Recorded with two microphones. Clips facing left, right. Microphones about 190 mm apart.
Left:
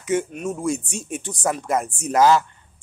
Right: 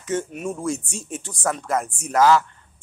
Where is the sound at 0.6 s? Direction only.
15° left (ahead or behind).